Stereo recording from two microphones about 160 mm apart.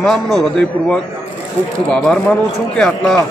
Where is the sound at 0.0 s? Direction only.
Centre (ahead or behind).